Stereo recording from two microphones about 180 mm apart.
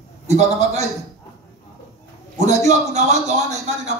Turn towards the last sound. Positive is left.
turn(degrees=-40)  # may be behind; listen again after turning